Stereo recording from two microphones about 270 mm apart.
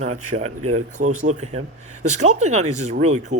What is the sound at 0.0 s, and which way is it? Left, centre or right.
Speech, right.